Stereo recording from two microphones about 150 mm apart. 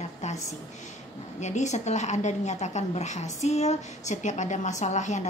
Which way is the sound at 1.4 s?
50° left (ahead or behind).